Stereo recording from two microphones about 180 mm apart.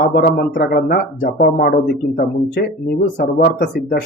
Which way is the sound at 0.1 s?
55° left (ahead or behind).